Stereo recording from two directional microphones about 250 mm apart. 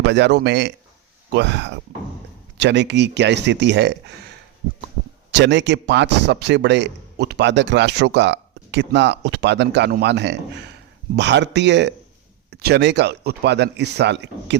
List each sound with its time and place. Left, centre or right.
0.0 s a man's voice: right
5.3 s a man's voice: right